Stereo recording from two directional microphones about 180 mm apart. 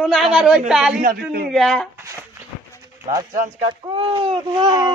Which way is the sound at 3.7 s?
30° right (ahead or behind).